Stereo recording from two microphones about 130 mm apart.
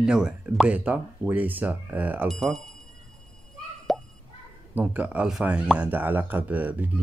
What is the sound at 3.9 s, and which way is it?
Plop, centre (ahead or behind).